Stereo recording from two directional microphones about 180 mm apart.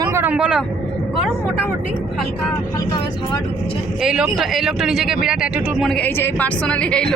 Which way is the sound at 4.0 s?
5° right (ahead or behind).